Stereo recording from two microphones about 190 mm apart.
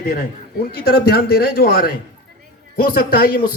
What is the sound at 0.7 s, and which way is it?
A man's voice, 55° left (ahead or behind).